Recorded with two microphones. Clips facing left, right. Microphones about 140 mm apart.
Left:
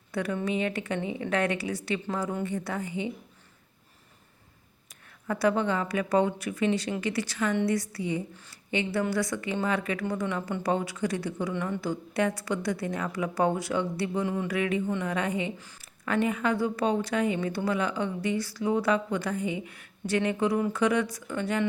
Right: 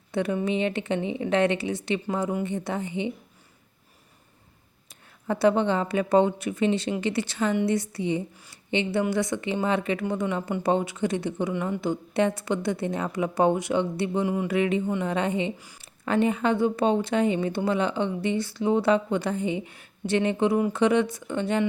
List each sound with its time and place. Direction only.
0.1 s speech: 25° right (ahead or behind)
4.9 s a woman's voice: 25° right (ahead or behind)
15.5 s speech: 10° right (ahead or behind)
15.8 s speech: 25° right (ahead or behind)